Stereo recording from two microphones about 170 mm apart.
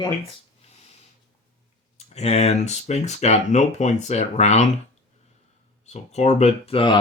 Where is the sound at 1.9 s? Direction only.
40° left (ahead or behind).